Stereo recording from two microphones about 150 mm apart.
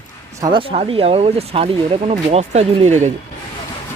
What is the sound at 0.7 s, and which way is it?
Speech, 40° right (ahead or behind).